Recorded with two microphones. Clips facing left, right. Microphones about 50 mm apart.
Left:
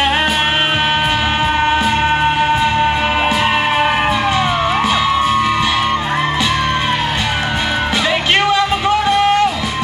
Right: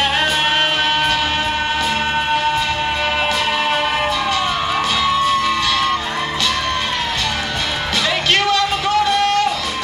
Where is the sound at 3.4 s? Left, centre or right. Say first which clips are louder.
Left 4 dB; left.